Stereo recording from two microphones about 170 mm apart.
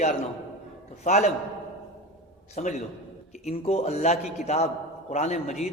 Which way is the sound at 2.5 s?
40° left (ahead or behind).